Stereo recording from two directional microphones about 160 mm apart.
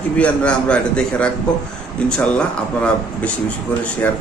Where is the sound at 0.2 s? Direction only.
5° left (ahead or behind).